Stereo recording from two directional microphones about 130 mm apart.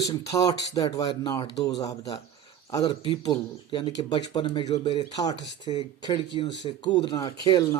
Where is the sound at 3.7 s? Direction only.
35° left (ahead or behind).